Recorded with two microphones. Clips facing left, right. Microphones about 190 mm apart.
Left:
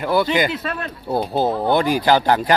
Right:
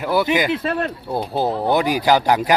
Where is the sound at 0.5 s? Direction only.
30° right (ahead or behind).